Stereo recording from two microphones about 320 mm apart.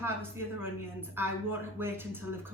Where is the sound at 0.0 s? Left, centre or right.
Centre.